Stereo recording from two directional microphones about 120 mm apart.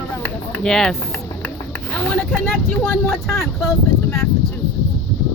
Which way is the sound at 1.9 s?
10° left (ahead or behind).